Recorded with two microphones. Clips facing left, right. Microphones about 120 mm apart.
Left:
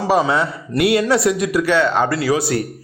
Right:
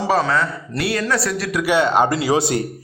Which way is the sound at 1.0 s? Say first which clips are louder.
Left 5 dB; 20° left (ahead or behind).